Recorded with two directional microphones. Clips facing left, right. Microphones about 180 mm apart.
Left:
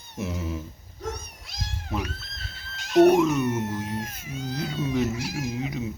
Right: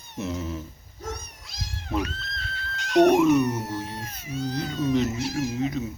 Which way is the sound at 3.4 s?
35° right (ahead or behind).